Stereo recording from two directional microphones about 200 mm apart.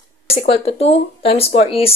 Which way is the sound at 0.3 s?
30° left (ahead or behind).